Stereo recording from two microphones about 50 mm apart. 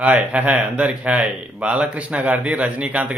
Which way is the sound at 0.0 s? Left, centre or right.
Right.